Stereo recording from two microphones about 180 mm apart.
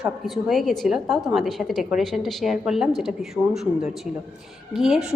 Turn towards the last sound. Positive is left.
turn(degrees=-5)  # may be behind; listen again after turning